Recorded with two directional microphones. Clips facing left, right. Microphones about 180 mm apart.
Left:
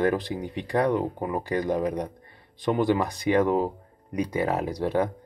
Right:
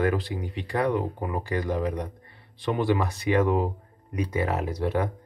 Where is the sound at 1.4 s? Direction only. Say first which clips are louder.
Left 2 dB; 20° left (ahead or behind).